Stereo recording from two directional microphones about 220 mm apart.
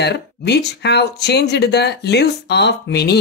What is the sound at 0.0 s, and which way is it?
Speech, 50° left (ahead or behind).